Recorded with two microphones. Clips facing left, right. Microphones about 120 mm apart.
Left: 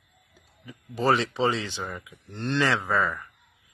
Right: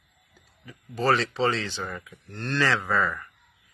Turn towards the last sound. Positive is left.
turn(degrees=15)  # may be behind; listen again after turning